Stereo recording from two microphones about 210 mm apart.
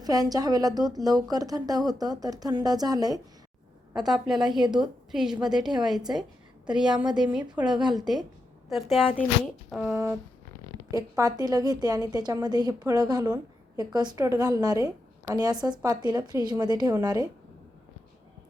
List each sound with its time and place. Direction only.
0.0 s speech: 15° right (ahead or behind)
4.0 s a woman's voice: centre (ahead or behind)
4.6 s a woman's voice: 20° right (ahead or behind)
5.1 s a woman's voice: 5° right (ahead or behind)
6.9 s a woman's voice: 20° right (ahead or behind)
7.3 s a woman's voice: 5° right (ahead or behind)
11.2 s a woman's voice: 20° right (ahead or behind)